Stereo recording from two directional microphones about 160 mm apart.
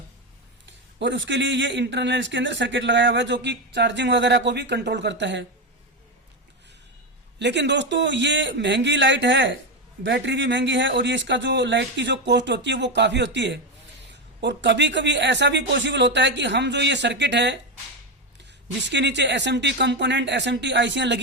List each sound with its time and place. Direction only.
0.9 s speech: 90° right
7.3 s speech: 90° right